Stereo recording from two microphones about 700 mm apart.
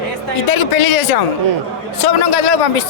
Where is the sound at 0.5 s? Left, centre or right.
Left.